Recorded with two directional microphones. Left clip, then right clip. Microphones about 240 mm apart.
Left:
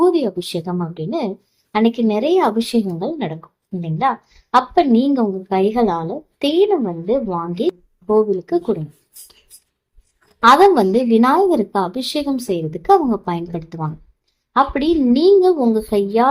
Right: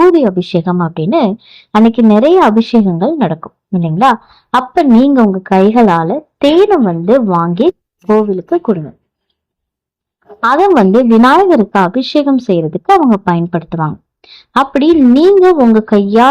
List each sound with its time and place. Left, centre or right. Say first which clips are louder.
0.1 s a woman's voice: right 9 dB; right
10.4 s a woman's voice: right 2 dB; right